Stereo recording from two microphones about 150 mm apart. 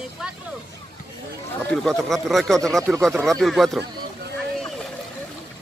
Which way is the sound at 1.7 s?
5° left (ahead or behind).